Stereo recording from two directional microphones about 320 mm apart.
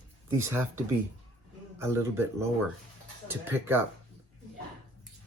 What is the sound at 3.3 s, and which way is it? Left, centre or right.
Speech, centre.